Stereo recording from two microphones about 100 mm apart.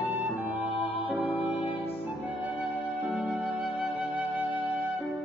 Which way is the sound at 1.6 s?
70° left (ahead or behind).